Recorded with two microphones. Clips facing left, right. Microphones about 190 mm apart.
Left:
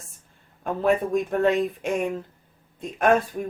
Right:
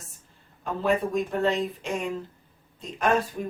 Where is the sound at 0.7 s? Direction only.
55° left (ahead or behind).